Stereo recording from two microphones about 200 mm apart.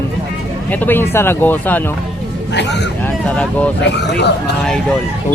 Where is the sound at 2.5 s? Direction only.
60° left (ahead or behind).